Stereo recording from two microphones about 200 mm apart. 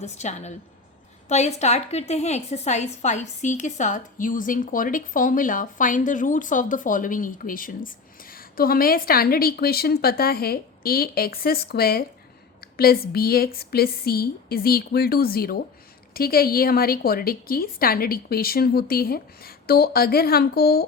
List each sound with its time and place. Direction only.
0.0 s a woman's voice: 35° left (ahead or behind)